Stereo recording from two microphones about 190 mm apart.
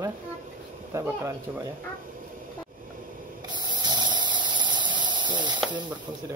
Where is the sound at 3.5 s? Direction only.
25° right (ahead or behind).